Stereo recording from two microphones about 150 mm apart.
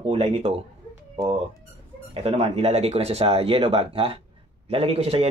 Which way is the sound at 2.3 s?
45° right (ahead or behind).